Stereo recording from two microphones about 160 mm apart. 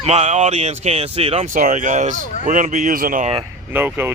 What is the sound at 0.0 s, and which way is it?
Speech, 45° right (ahead or behind).